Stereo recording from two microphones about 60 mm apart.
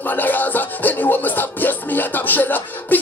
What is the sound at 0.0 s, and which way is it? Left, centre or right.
Music, left.